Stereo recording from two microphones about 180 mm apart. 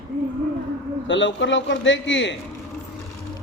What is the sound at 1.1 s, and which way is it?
Speech, 90° left.